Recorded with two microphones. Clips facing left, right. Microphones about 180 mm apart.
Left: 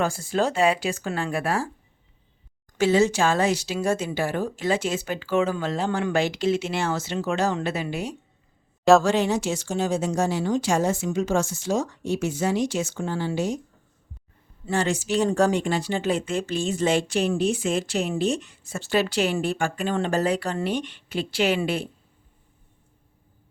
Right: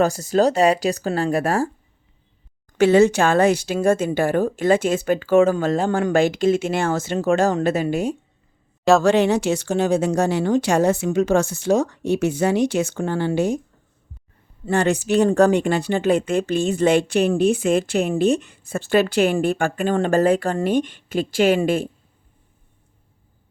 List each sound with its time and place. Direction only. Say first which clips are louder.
0.0 s speech: right 6 dB; 40° right (ahead or behind)
2.7 s speech: right 6 dB; 60° right (ahead or behind)
8.8 s speech: even; centre (ahead or behind)
9.0 s speech: right 6 dB; 65° right (ahead or behind)
14.6 s speech: right 5 dB; 60° right (ahead or behind)